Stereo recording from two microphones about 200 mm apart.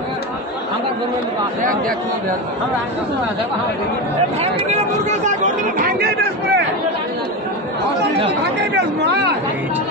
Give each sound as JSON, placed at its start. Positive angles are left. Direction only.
{"t": 4.4, "sound": "speech", "side_deg": -35}
{"t": 8.7, "sound": "speech", "side_deg": -55}